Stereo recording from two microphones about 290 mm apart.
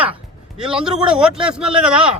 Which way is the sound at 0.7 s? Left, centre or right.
Centre.